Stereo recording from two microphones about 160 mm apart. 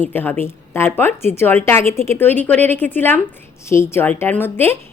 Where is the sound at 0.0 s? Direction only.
10° left (ahead or behind).